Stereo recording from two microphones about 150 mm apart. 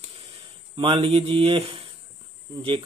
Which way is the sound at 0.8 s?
40° right (ahead or behind).